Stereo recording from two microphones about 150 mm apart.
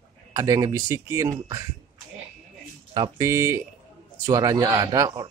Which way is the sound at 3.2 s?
20° right (ahead or behind).